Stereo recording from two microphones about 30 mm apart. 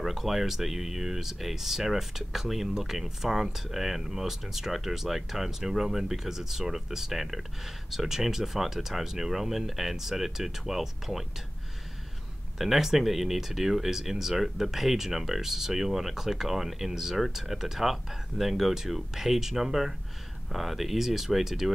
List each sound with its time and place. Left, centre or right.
0.0 s speech: centre
12.5 s speech: centre